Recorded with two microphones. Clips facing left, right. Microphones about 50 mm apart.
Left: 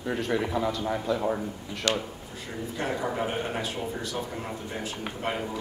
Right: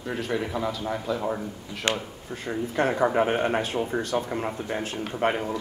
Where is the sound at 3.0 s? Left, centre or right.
Right.